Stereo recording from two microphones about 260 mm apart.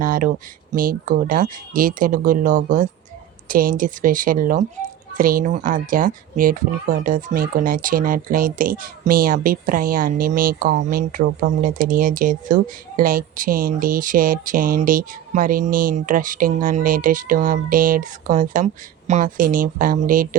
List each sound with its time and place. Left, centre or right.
0.0 s speech: right